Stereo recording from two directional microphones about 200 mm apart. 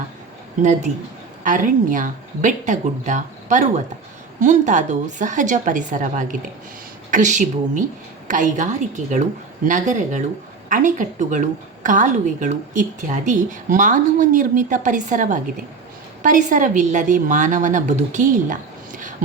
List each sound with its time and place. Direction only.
0.6 s a woman's voice: 35° right (ahead or behind)